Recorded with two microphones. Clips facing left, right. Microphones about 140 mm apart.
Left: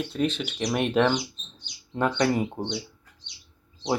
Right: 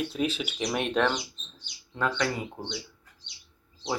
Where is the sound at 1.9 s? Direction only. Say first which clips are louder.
Left 5 dB; 25° left (ahead or behind).